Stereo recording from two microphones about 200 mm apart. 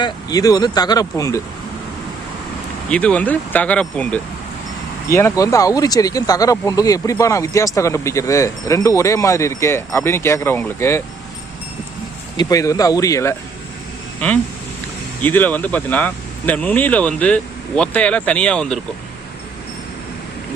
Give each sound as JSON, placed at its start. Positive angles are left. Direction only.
{"t": 0.0, "sound": "speech", "side_deg": 20}
{"t": 2.9, "sound": "speech", "side_deg": 5}
{"t": 12.4, "sound": "speech", "side_deg": 15}
{"t": 15.2, "sound": "speech", "side_deg": 10}